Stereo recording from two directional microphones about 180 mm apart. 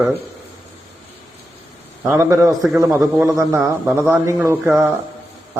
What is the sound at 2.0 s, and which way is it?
Speech, 15° right (ahead or behind).